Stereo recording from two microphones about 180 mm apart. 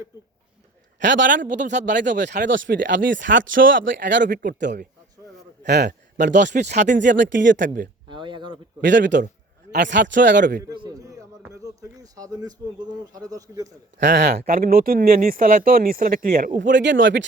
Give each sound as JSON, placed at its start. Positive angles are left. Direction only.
{"t": 1.0, "sound": "a man's voice", "side_deg": -90}
{"t": 1.5, "sound": "speech", "side_deg": -40}
{"t": 2.1, "sound": "speech", "side_deg": -70}
{"t": 4.2, "sound": "speech", "side_deg": -50}
{"t": 4.6, "sound": "a man's voice", "side_deg": -70}
{"t": 6.2, "sound": "speech", "side_deg": -45}
{"t": 7.4, "sound": "speech", "side_deg": -85}
{"t": 8.0, "sound": "a sound", "side_deg": -25}
{"t": 8.8, "sound": "speech", "side_deg": -80}
{"t": 10.6, "sound": "a sound", "side_deg": -20}
{"t": 13.1, "sound": "speech", "side_deg": -20}
{"t": 14.1, "sound": "speech", "side_deg": -70}
{"t": 16.6, "sound": "speech", "side_deg": -85}